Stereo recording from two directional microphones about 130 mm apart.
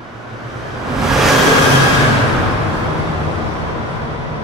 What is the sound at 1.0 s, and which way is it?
Vehicle, centre (ahead or behind).